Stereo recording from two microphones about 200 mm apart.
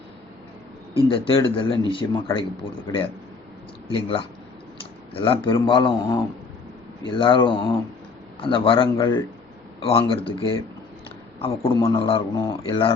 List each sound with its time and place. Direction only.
0.9 s a man's voice: 25° left (ahead or behind)